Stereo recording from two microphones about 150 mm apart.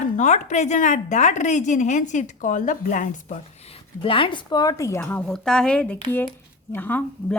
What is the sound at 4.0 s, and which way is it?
Speech, 35° left (ahead or behind).